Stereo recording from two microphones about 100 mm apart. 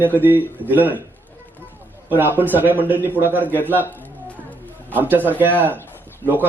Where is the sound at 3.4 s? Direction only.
20° left (ahead or behind).